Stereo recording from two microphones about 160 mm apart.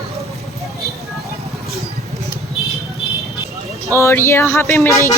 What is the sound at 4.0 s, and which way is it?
Speech, 15° left (ahead or behind).